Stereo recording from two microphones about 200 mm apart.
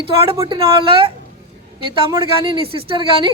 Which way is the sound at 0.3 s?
20° right (ahead or behind).